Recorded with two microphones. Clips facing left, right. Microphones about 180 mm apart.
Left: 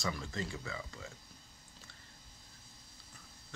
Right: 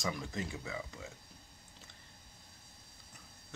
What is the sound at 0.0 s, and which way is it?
Speech, 15° right (ahead or behind).